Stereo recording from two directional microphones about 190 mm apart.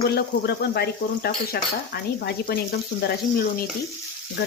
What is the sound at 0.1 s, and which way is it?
Speech, 55° left (ahead or behind).